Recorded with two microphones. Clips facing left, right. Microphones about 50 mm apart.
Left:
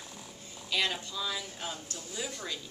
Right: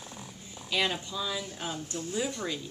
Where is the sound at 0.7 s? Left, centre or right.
Centre.